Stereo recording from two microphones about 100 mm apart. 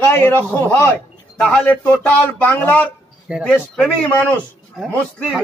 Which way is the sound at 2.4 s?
20° left (ahead or behind).